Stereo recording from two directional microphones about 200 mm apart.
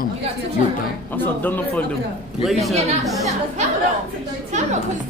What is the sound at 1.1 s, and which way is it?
Speech, 10° left (ahead or behind).